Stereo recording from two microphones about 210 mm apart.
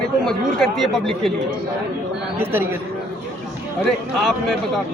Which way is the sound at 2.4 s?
10° right (ahead or behind).